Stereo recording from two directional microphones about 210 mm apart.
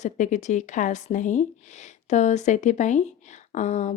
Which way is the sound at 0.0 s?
35° left (ahead or behind).